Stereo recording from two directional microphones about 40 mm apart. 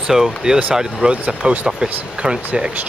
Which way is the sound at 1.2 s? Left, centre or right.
Right.